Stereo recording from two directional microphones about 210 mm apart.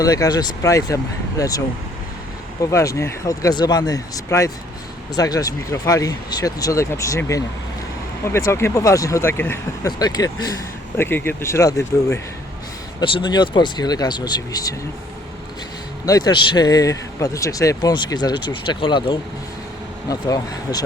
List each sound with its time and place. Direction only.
0.0 s a man's voice: 15° left (ahead or behind)
16.0 s a man's voice: 20° left (ahead or behind)